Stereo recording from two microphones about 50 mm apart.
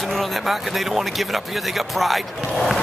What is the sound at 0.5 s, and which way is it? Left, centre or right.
Speech, centre.